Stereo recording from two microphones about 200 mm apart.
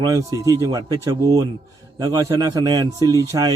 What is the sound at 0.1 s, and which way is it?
A man's voice, 15° right (ahead or behind).